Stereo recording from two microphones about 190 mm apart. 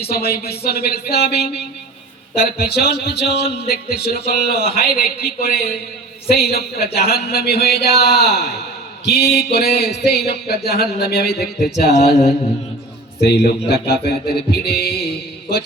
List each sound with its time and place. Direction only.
0.1 s a man's voice: 55° left (ahead or behind)